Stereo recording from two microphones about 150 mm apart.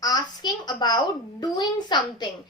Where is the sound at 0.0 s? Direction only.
25° left (ahead or behind).